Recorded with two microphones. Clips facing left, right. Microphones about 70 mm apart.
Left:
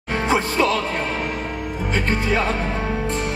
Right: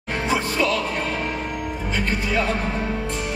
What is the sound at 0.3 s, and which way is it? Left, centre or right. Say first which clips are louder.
Music: left 3 dB; left.